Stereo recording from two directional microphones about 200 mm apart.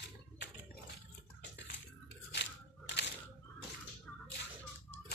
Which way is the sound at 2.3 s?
60° left (ahead or behind).